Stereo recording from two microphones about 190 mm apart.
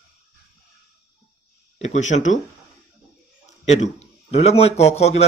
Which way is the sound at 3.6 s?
35° left (ahead or behind).